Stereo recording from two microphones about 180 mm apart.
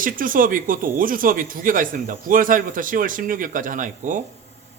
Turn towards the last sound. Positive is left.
turn(degrees=-45)  # may be behind; listen again after turning